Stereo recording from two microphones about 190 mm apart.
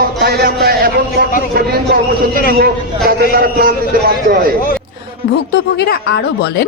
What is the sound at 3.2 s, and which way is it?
Speech, 55° right (ahead or behind).